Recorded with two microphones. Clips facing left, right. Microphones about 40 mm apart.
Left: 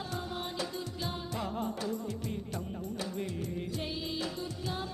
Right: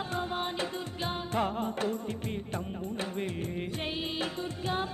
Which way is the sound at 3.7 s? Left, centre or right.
Right.